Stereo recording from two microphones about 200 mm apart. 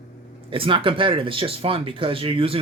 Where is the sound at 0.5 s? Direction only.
25° right (ahead or behind).